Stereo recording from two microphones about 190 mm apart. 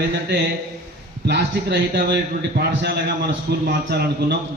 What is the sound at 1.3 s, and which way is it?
A man's voice, 60° right (ahead or behind).